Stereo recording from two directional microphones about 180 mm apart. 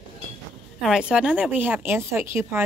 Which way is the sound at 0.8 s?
5° right (ahead or behind).